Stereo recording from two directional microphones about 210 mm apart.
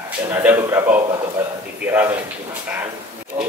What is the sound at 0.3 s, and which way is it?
Speech, 10° right (ahead or behind).